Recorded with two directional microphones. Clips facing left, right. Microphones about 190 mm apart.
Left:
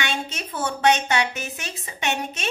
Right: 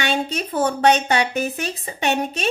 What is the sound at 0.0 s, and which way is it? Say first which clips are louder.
A woman's voice: right 6 dB; 35° right (ahead or behind).